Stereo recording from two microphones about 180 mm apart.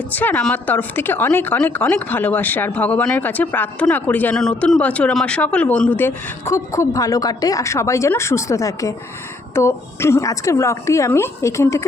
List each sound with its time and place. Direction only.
0.1 s a woman's voice: 10° left (ahead or behind)